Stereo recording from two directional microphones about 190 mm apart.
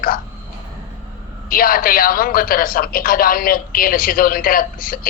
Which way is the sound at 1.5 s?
50° left (ahead or behind).